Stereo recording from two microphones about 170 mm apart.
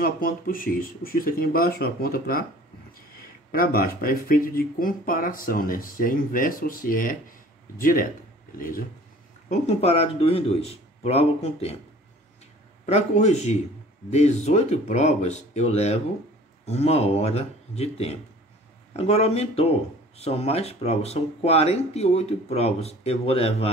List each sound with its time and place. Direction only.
0.0 s speech: 55° left (ahead or behind)
9.5 s speech: 40° left (ahead or behind)
12.8 s speech: 40° left (ahead or behind)